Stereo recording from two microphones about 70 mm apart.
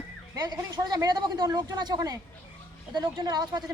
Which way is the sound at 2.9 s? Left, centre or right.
Right.